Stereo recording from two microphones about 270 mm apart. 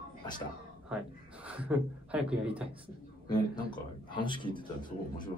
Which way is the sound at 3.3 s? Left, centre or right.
Centre.